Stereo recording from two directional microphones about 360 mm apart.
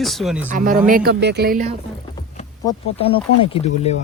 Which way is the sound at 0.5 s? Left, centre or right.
Right.